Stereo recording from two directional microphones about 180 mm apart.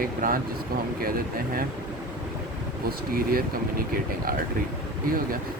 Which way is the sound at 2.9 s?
55° right (ahead or behind).